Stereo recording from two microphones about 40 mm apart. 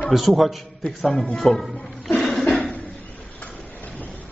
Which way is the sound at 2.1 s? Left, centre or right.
Centre.